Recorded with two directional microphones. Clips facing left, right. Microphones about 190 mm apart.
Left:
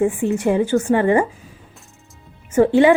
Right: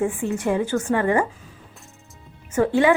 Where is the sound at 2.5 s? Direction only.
20° left (ahead or behind).